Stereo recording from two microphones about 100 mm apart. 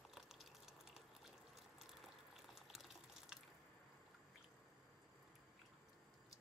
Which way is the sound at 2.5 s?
5° right (ahead or behind).